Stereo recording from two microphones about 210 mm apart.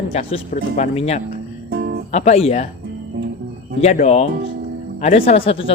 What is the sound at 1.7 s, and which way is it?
Music, 50° right (ahead or behind).